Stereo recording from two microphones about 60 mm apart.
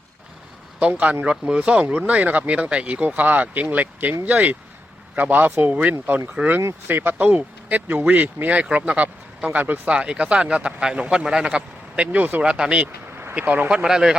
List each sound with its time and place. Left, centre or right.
0.8 s speech: right
9.9 s speech: centre
12.4 s speech: centre
13.8 s speech: centre